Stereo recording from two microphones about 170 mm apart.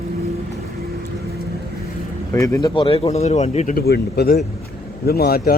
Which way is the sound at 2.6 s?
30° left (ahead or behind).